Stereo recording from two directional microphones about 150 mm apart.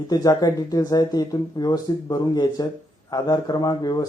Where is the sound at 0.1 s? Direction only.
25° left (ahead or behind).